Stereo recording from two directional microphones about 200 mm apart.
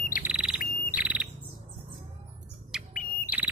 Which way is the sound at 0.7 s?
45° left (ahead or behind).